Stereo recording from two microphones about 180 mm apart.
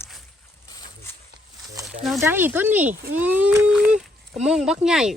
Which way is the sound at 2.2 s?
10° right (ahead or behind).